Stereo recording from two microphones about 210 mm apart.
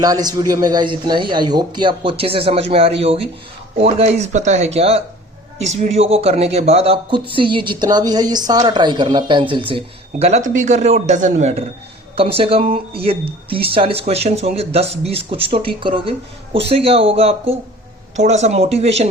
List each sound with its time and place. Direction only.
0.0 s speech: 20° right (ahead or behind)